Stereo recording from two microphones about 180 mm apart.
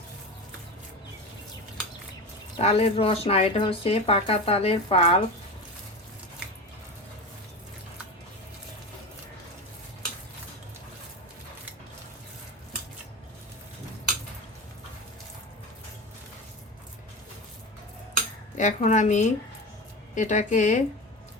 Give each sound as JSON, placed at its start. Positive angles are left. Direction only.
{"t": 2.6, "sound": "speech", "side_deg": 35}
{"t": 18.5, "sound": "a woman's voice", "side_deg": 40}